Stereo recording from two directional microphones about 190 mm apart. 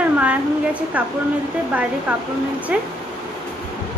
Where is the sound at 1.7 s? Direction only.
10° right (ahead or behind).